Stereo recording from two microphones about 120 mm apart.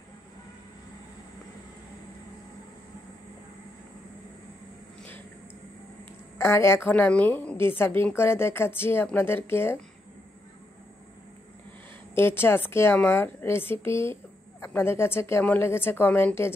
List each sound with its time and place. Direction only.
6.3 s speech: 20° left (ahead or behind)
12.2 s speech: 20° left (ahead or behind)